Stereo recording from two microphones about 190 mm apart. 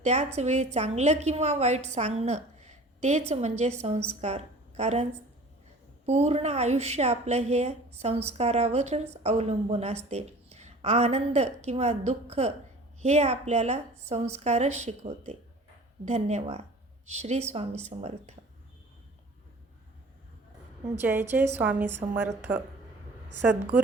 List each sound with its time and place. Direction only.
0.0 s a woman's voice: 35° right (ahead or behind)
6.1 s a woman's voice: 35° right (ahead or behind)
21.0 s a woman's voice: 10° right (ahead or behind)